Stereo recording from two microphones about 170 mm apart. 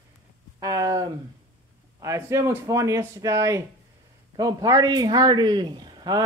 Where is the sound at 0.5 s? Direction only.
20° right (ahead or behind).